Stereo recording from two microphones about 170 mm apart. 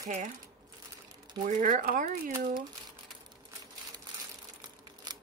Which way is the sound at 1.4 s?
50° right (ahead or behind).